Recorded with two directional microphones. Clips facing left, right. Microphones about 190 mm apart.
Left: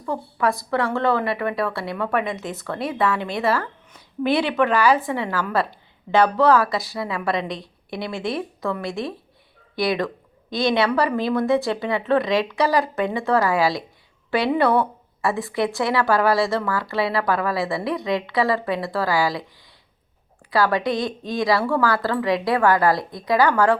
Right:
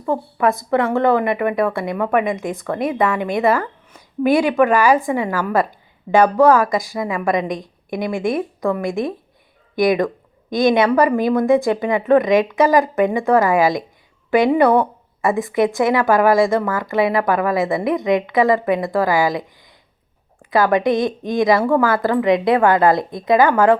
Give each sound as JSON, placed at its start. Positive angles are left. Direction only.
{"t": 0.1, "sound": "a woman's voice", "side_deg": -20}
{"t": 3.3, "sound": "a sound", "side_deg": -15}
{"t": 4.3, "sound": "speech", "side_deg": -45}
{"t": 4.5, "sound": "a woman's voice", "side_deg": -15}
{"t": 7.4, "sound": "a woman's voice", "side_deg": -50}
{"t": 8.4, "sound": "a woman's voice", "side_deg": -15}
{"t": 8.9, "sound": "speech", "side_deg": -50}
{"t": 9.8, "sound": "a woman's voice", "side_deg": -15}
{"t": 14.8, "sound": "a woman's voice", "side_deg": -15}
{"t": 20.5, "sound": "speech", "side_deg": -20}